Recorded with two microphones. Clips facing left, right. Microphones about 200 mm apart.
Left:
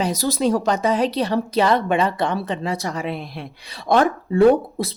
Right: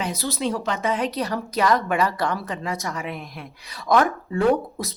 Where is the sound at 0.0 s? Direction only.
40° left (ahead or behind).